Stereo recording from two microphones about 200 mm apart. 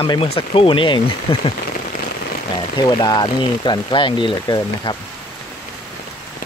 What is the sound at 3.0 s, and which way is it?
Speech, 20° left (ahead or behind).